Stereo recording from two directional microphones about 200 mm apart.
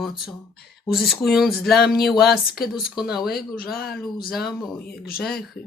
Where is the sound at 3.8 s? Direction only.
50° left (ahead or behind).